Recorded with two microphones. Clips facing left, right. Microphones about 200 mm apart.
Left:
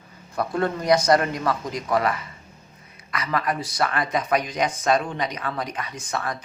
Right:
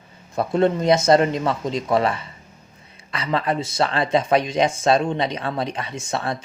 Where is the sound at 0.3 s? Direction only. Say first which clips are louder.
Right 5 dB; 25° right (ahead or behind).